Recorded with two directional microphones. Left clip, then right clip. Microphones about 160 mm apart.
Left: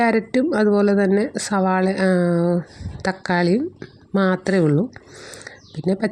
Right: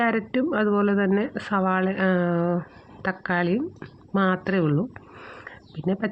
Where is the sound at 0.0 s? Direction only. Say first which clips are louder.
Left 5 dB; 45° left (ahead or behind).